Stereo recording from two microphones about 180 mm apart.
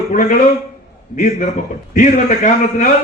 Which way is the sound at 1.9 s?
45° left (ahead or behind).